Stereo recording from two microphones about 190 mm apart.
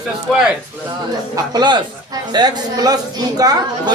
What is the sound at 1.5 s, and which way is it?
A man's voice, 20° right (ahead or behind).